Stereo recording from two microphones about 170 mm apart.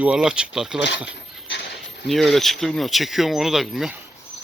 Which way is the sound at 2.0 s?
Centre (ahead or behind).